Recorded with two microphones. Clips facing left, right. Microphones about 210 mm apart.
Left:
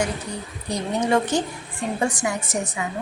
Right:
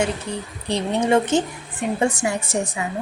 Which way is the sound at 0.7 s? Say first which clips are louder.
Right 3 dB; 25° right (ahead or behind).